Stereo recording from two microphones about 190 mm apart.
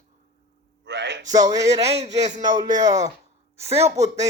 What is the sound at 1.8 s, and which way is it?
Speech, 35° right (ahead or behind).